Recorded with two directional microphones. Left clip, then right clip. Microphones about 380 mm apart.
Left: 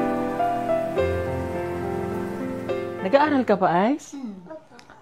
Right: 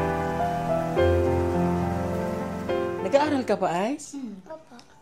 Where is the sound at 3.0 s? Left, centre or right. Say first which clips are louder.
Left 5 dB; centre.